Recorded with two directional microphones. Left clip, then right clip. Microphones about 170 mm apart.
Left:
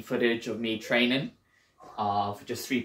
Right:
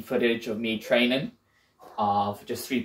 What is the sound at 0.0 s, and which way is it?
Speech, 20° left (ahead or behind).